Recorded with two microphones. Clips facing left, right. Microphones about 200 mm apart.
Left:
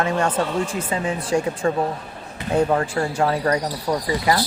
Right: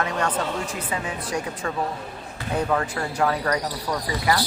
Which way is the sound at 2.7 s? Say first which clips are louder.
Left 4 dB; 30° left (ahead or behind).